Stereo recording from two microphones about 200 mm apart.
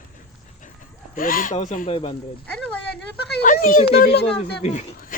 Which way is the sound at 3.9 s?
55° left (ahead or behind).